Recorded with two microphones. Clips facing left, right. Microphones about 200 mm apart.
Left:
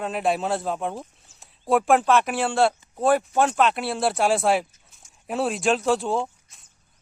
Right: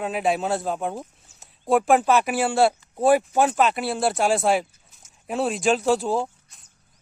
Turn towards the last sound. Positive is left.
turn(degrees=0)  # may be behind; listen again after turning